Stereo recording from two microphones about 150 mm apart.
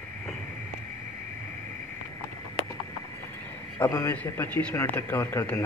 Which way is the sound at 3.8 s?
25° left (ahead or behind).